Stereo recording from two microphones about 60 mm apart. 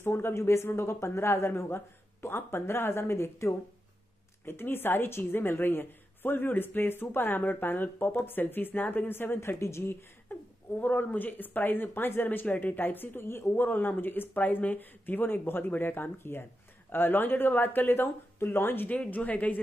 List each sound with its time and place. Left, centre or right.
0.0 s speech: left
10.3 s speech: left
18.9 s a woman's voice: left